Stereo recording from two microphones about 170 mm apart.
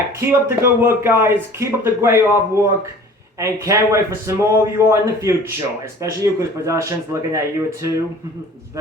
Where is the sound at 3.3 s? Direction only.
20° right (ahead or behind).